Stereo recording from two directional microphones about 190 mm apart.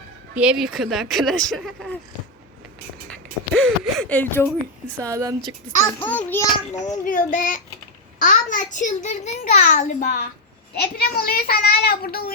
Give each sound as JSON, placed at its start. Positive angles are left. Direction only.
{"t": 0.3, "sound": "speech", "side_deg": -5}
{"t": 3.1, "sound": "speech", "side_deg": 5}
{"t": 4.9, "sound": "speech", "side_deg": -15}
{"t": 6.0, "sound": "a child's voice", "side_deg": 10}
{"t": 7.0, "sound": "a child's voice", "side_deg": 45}